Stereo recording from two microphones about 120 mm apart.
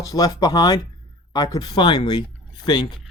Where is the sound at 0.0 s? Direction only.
30° left (ahead or behind).